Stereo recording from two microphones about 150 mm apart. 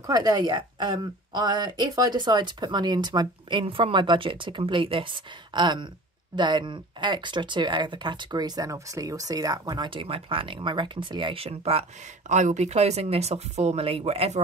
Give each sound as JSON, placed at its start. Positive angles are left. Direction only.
{"t": 0.0, "sound": "a woman's voice", "side_deg": -25}
{"t": 12.3, "sound": "speech", "side_deg": -55}